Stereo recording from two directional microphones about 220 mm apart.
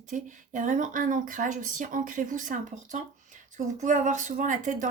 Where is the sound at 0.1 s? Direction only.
35° right (ahead or behind).